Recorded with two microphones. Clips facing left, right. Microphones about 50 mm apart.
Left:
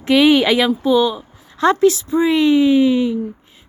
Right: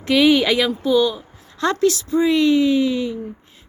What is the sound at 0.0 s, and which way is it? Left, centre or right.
Speech, centre.